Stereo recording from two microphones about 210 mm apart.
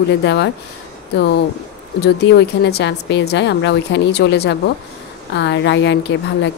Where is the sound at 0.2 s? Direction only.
55° left (ahead or behind).